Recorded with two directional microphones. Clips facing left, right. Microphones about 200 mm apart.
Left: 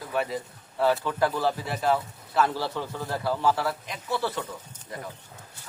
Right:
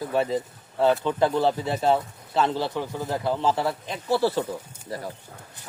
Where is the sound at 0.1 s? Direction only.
25° right (ahead or behind).